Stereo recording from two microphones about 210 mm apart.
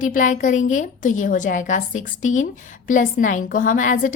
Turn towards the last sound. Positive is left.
turn(degrees=40)  # may be behind; listen again after turning